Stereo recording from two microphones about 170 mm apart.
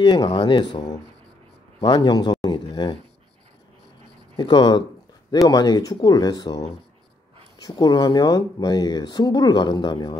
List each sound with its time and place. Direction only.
0.0 s speech: 25° left (ahead or behind)
4.4 s speech: 25° left (ahead or behind)